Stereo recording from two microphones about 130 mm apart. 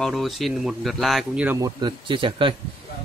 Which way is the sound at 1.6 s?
30° right (ahead or behind).